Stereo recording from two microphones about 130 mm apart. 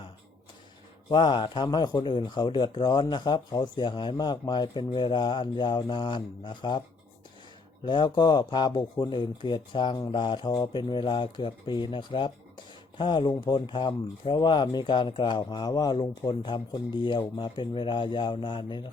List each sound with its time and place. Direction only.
1.1 s speech: 35° left (ahead or behind)
7.9 s speech: 35° left (ahead or behind)